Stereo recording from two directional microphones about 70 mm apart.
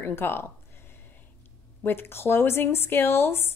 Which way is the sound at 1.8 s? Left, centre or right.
Left.